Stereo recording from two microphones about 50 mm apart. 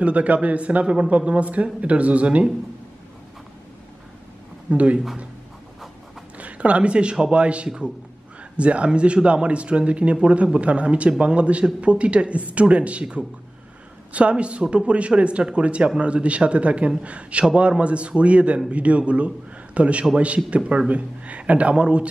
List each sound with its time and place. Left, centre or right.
0.0 s a man's voice: right
4.6 s a man's voice: right
6.3 s a man's voice: right